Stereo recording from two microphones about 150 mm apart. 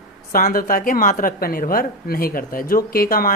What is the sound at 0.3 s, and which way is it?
A woman's voice, 70° left (ahead or behind).